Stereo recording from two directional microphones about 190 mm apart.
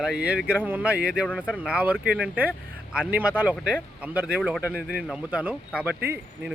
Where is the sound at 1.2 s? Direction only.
5° left (ahead or behind).